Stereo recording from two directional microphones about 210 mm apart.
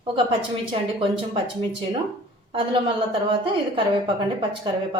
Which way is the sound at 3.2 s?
25° right (ahead or behind).